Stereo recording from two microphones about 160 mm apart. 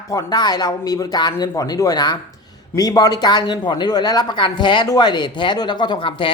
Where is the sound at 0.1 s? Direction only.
20° left (ahead or behind).